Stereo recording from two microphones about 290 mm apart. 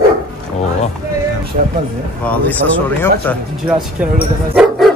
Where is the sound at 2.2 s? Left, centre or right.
Centre.